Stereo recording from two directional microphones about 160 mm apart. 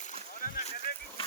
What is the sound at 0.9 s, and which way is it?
Vehicle, 70° left (ahead or behind).